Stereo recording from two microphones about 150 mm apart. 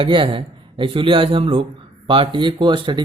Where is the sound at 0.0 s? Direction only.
35° right (ahead or behind).